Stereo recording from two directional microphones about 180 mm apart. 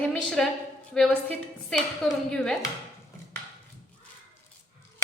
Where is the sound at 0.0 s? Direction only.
5° left (ahead or behind).